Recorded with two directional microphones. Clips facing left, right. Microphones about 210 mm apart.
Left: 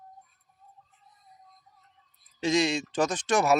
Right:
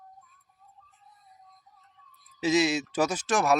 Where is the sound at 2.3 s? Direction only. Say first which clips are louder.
Right 1 dB; 5° right (ahead or behind).